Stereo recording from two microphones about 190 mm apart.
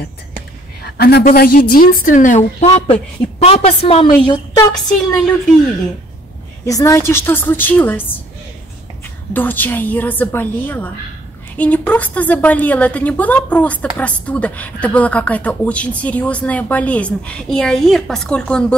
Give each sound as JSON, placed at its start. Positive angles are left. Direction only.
{"t": 0.8, "sound": "a woman's voice", "side_deg": 55}
{"t": 4.7, "sound": "a woman's voice", "side_deg": 5}
{"t": 6.6, "sound": "a woman's voice", "side_deg": 15}
{"t": 9.3, "sound": "a woman's voice", "side_deg": 10}